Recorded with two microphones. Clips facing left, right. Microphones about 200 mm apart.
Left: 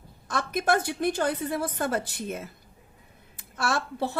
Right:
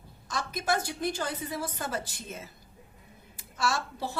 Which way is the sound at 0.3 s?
60° left (ahead or behind).